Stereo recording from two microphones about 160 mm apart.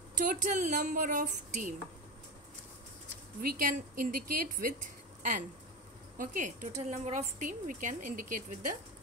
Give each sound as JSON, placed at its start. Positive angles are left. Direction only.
{"t": 0.2, "sound": "speech", "side_deg": -50}
{"t": 3.3, "sound": "speech", "side_deg": -60}
{"t": 6.1, "sound": "a woman's voice", "side_deg": -55}